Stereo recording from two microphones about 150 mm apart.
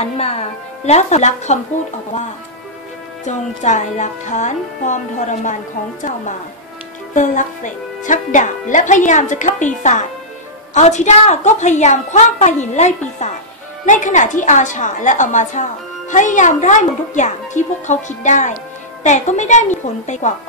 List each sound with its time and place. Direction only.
0.2 s a woman's voice: 40° left (ahead or behind)
3.3 s a woman's voice: 50° left (ahead or behind)
7.2 s a woman's voice: 55° left (ahead or behind)
10.7 s a woman's voice: 50° left (ahead or behind)